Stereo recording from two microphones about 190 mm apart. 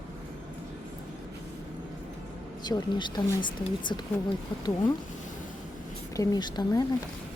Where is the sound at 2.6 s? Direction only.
25° left (ahead or behind).